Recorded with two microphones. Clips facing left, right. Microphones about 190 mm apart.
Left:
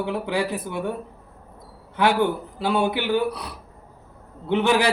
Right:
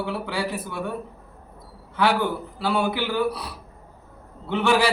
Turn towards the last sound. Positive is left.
turn(degrees=20)  # may be behind; listen again after turning